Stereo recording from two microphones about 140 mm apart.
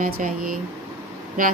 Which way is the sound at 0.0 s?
75° right (ahead or behind).